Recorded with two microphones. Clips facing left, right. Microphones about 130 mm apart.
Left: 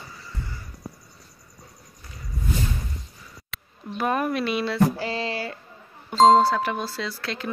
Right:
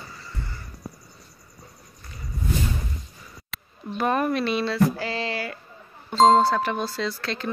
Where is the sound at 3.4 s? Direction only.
Centre (ahead or behind).